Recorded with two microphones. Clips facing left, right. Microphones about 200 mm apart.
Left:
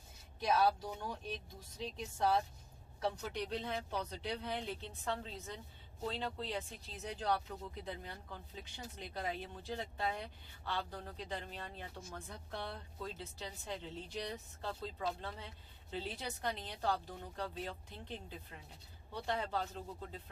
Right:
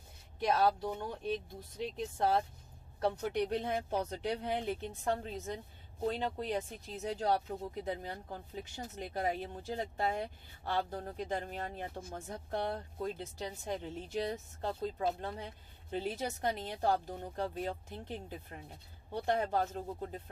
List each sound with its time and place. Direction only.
0.4 s speech: 55° right (ahead or behind)